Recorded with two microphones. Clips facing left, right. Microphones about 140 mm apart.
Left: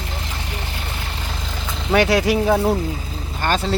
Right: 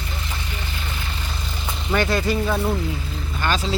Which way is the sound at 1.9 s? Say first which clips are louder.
Left 5 dB; 90° left.